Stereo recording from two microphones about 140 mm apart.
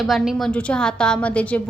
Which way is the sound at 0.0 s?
Centre (ahead or behind).